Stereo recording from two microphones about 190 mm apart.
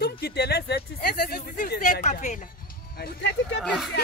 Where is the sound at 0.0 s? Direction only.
55° left (ahead or behind); by 2.4 s 40° left (ahead or behind).